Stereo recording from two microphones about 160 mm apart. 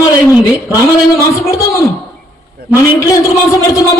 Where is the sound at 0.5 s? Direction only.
20° left (ahead or behind).